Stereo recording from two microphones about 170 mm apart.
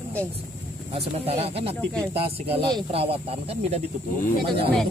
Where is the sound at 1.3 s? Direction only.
35° right (ahead or behind).